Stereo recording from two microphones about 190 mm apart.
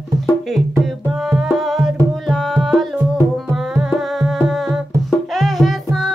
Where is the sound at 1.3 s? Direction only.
Centre (ahead or behind).